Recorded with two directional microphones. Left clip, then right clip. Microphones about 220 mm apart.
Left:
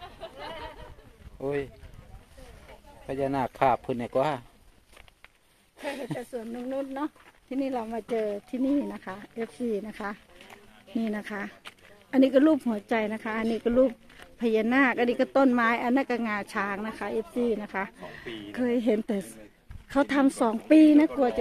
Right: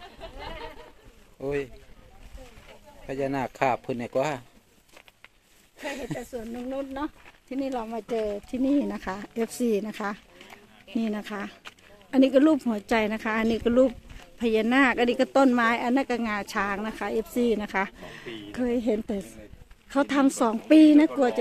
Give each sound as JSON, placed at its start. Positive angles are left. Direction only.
{"t": 0.2, "sound": "chatter", "side_deg": 45}
{"t": 1.4, "sound": "boat", "side_deg": 10}
{"t": 3.1, "sound": "speech", "side_deg": 10}
{"t": 5.8, "sound": "speech", "side_deg": 5}
{"t": 8.2, "sound": "speech", "side_deg": -15}
{"t": 8.8, "sound": "speech", "side_deg": -45}
{"t": 9.8, "sound": "speech", "side_deg": -25}
{"t": 11.1, "sound": "speech", "side_deg": -5}